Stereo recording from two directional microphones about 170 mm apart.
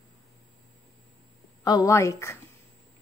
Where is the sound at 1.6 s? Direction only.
20° left (ahead or behind).